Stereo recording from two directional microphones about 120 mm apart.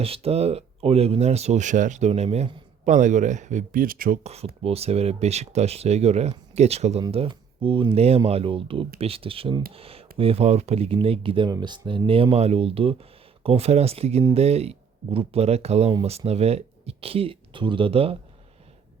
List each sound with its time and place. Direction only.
0.0 s speech: 55° right (ahead or behind)
2.8 s speech: 90° right
4.2 s speech: 60° right (ahead or behind)
7.1 s speech: 50° right (ahead or behind)